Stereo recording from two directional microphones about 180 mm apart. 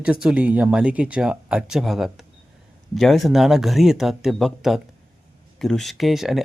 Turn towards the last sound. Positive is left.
turn(degrees=0)  # may be behind; listen again after turning